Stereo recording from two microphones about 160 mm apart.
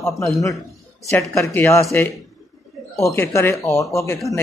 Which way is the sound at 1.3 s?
20° left (ahead or behind).